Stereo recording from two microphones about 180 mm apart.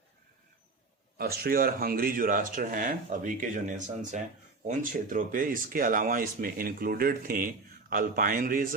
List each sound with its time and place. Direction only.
1.2 s speech: 60° right (ahead or behind)